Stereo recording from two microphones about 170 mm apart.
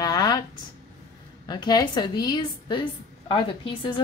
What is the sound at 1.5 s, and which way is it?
A woman's voice, 25° left (ahead or behind).